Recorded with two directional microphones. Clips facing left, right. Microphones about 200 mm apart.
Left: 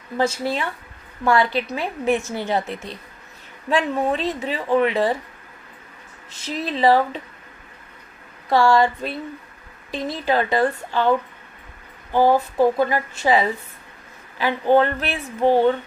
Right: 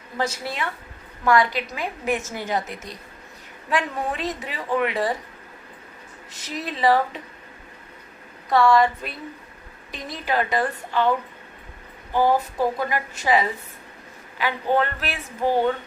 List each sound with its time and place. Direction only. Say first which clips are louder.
0.2 s speech: left 5 dB; 30° left (ahead or behind)
6.4 s speech: left 3 dB; 30° left (ahead or behind)
8.4 s speech: left 1 dB; 30° left (ahead or behind)
12.1 s speech: left 4 dB; 25° left (ahead or behind)